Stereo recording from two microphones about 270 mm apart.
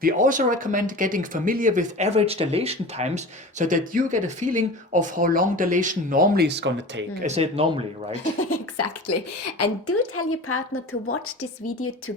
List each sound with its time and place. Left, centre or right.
0.0 s speech: right
7.3 s speech: right
8.1 s a woman's voice: left